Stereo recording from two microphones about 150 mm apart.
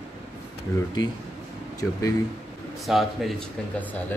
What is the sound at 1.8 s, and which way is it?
Speech, 20° left (ahead or behind).